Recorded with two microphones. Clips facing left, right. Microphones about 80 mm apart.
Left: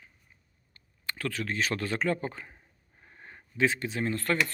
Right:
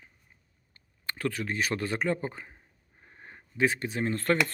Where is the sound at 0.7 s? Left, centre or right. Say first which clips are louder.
Even; right.